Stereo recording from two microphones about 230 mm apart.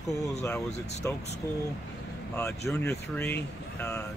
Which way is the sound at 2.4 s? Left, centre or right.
Centre.